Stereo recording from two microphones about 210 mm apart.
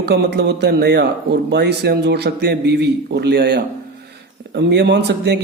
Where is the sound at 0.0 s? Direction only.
50° right (ahead or behind).